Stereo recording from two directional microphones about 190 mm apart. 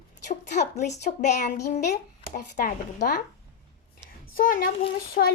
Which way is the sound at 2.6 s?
50° left (ahead or behind).